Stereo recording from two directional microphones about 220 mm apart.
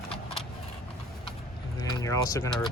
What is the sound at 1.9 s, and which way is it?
Vehicle, 15° left (ahead or behind).